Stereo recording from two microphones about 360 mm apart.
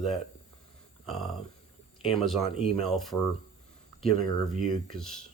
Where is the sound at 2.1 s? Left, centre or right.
Centre.